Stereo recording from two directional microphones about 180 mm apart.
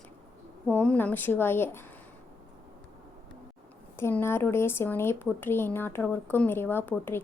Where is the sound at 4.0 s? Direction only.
15° left (ahead or behind).